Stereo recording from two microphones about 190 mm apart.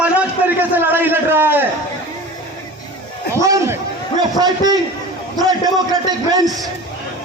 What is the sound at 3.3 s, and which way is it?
A man's voice, 15° right (ahead or behind).